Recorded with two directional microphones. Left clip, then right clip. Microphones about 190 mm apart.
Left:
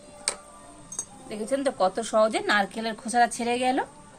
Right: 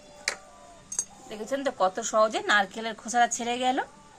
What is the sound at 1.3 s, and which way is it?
A woman's voice, 5° right (ahead or behind).